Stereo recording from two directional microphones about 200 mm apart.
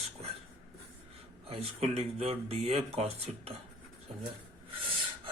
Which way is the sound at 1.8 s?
30° right (ahead or behind).